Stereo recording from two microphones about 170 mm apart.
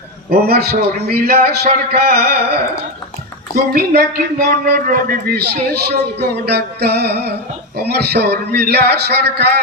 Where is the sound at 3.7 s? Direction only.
60° right (ahead or behind).